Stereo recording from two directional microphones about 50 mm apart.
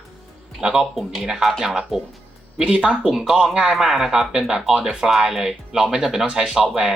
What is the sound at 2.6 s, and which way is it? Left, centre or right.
Speech, right.